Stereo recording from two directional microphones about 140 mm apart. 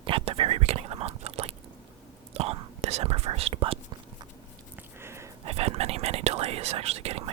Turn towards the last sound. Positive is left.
turn(degrees=-45)  # may be behind; listen again after turning